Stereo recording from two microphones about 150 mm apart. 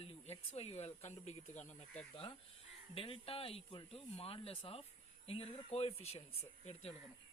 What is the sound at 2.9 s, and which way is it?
Speech, 40° left (ahead or behind).